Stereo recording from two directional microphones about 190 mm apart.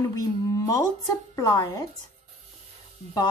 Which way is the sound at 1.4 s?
20° left (ahead or behind).